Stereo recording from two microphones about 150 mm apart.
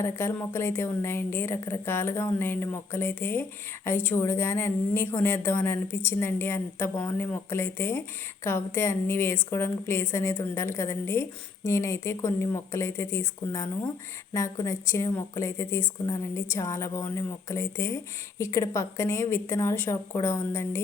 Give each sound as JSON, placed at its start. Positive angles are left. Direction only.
{"t": 0.0, "sound": "a woman's voice", "side_deg": 15}